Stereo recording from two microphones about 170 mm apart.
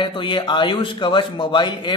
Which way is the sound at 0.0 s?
30° left (ahead or behind).